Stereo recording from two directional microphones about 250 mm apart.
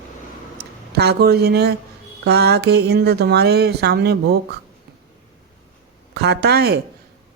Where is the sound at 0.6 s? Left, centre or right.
Right.